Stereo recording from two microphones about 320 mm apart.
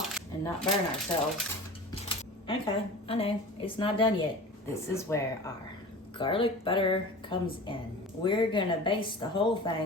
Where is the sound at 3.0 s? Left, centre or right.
Centre.